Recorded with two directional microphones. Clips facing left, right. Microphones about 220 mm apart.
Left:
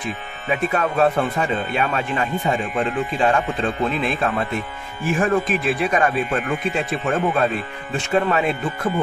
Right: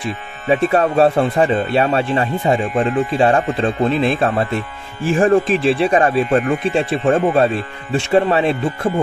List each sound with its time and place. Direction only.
0.5 s speech: 30° right (ahead or behind)